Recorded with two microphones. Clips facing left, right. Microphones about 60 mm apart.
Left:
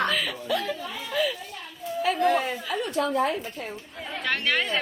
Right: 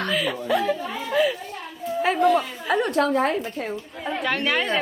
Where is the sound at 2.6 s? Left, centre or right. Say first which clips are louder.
Right 6 dB; right.